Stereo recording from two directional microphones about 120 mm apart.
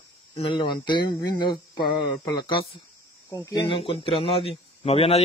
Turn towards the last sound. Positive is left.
turn(degrees=55)  # may be behind; listen again after turning